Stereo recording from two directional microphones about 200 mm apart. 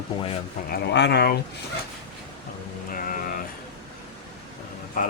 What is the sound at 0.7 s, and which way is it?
Speech, 55° left (ahead or behind).